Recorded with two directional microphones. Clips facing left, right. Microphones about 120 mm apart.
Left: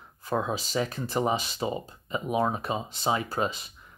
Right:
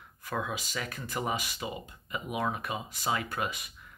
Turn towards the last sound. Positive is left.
turn(degrees=30)  # may be behind; listen again after turning